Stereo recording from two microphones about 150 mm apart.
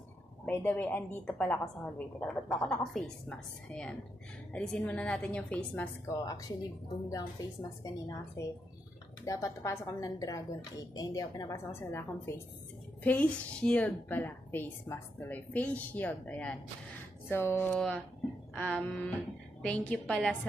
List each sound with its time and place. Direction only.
0.5 s a woman's voice: 10° left (ahead or behind)
6.0 s speech: 25° left (ahead or behind)
7.8 s a woman's voice: 25° left (ahead or behind); by 20.2 s 5° left (ahead or behind)